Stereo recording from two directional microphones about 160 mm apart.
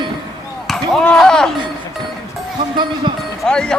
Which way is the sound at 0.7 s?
5° left (ahead or behind).